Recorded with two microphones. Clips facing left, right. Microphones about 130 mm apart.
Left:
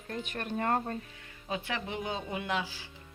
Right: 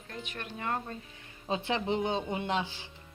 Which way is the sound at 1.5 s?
25° right (ahead or behind).